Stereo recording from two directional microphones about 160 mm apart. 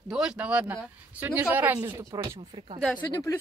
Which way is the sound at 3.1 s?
20° left (ahead or behind).